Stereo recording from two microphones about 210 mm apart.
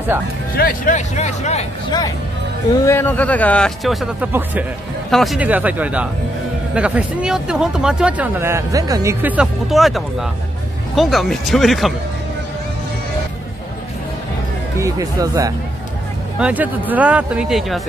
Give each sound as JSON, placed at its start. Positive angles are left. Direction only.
{"t": 0.6, "sound": "speech", "side_deg": 40}
{"t": 2.8, "sound": "speech", "side_deg": 10}
{"t": 14.8, "sound": "speech", "side_deg": -15}